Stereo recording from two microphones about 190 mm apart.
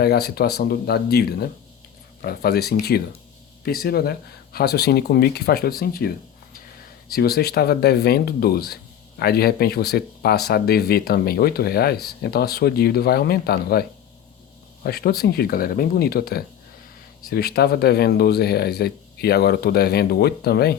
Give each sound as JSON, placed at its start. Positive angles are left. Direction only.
{"t": 0.0, "sound": "speech", "side_deg": 55}
{"t": 14.8, "sound": "speech", "side_deg": 55}